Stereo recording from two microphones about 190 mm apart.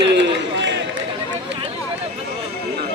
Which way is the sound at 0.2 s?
70° right (ahead or behind).